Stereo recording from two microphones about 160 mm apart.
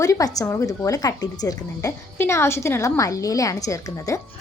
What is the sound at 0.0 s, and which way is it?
A woman's voice, 20° left (ahead or behind).